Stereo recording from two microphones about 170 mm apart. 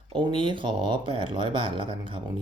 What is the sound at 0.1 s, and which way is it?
Speech, 30° right (ahead or behind).